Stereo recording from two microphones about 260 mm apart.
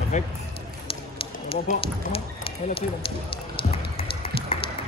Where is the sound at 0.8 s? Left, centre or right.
Left.